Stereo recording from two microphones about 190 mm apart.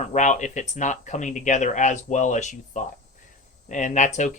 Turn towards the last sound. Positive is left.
turn(degrees=40)  # may be behind; listen again after turning